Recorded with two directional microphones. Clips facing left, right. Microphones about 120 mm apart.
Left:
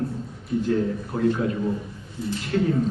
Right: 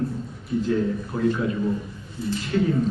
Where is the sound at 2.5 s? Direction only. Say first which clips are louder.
Even; 45° left (ahead or behind).